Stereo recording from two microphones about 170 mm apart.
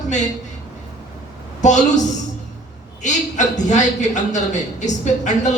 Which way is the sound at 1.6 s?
45° left (ahead or behind).